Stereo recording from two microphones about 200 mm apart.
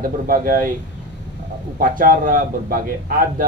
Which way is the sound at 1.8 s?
45° right (ahead or behind).